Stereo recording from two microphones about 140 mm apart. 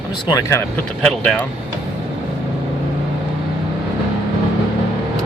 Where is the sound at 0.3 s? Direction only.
25° left (ahead or behind).